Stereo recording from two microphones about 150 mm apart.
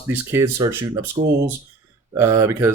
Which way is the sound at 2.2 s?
20° right (ahead or behind).